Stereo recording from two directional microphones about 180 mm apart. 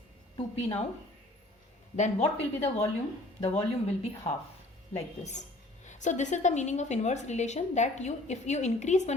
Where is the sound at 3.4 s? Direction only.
35° left (ahead or behind).